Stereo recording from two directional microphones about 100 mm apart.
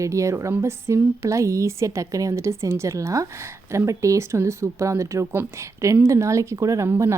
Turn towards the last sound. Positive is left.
turn(degrees=-30)  # may be behind; listen again after turning